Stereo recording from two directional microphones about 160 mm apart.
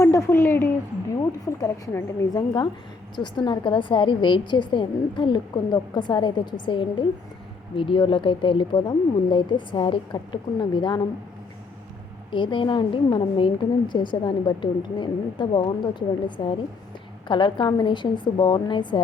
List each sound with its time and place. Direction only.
0.0 s a woman's voice: 20° left (ahead or behind)
12.3 s a woman's voice: 30° left (ahead or behind)